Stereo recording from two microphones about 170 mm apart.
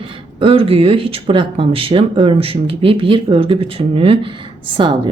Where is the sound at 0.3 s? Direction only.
35° right (ahead or behind).